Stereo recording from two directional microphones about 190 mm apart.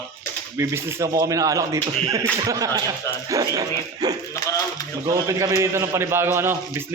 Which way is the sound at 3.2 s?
20° right (ahead or behind).